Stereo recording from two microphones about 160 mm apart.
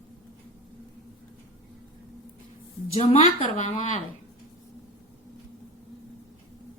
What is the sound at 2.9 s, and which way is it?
A woman's voice, 40° left (ahead or behind).